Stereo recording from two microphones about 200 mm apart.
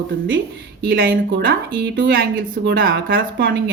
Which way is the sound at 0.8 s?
50° right (ahead or behind).